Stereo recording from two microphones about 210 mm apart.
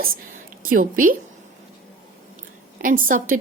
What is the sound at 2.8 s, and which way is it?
Speech, 40° right (ahead or behind).